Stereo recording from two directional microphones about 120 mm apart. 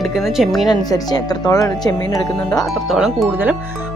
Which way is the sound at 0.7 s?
35° left (ahead or behind).